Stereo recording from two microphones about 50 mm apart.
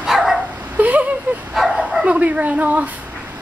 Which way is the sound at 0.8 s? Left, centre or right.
Right.